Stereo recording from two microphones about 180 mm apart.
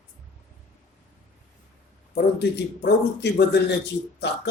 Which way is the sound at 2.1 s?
70° left (ahead or behind).